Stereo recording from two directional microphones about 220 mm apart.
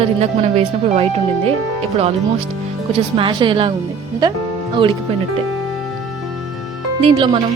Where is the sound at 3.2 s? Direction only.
20° right (ahead or behind).